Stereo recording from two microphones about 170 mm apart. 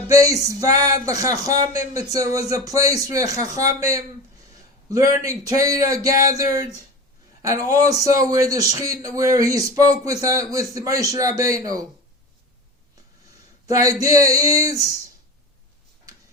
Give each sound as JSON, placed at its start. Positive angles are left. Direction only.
{"t": 0.1, "sound": "a man's voice", "side_deg": -20}
{"t": 13.7, "sound": "a man's voice", "side_deg": -20}